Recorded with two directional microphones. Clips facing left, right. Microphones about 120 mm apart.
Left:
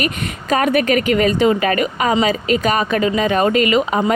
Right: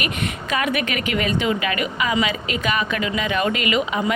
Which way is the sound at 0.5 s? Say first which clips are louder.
Left 9 dB; 40° left (ahead or behind).